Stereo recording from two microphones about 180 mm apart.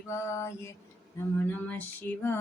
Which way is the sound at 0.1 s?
15° left (ahead or behind).